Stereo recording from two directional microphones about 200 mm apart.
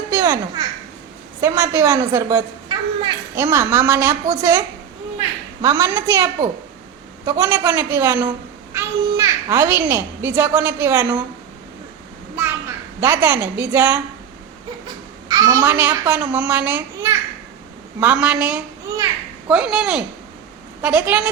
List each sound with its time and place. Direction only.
0.1 s babbling: 15° right (ahead or behind)
1.4 s a woman's voice: 10° right (ahead or behind)
5.6 s a child's voice: 15° right (ahead or behind)
12.4 s a woman's voice: 10° right (ahead or behind)
15.3 s a child's voice: 15° right (ahead or behind)